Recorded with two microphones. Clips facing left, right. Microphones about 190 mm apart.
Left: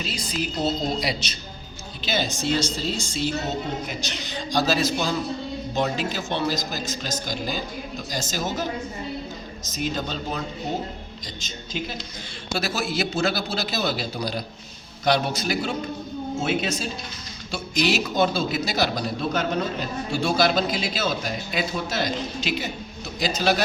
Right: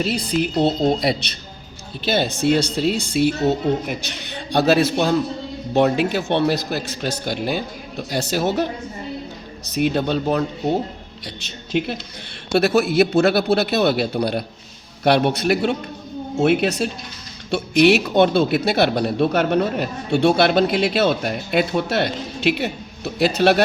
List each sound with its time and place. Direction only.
0.0 s speech: 60° right (ahead or behind)
9.6 s speech: 65° right (ahead or behind)